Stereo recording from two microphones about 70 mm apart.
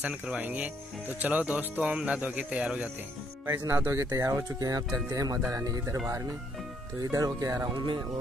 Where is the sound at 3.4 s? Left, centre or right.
Right.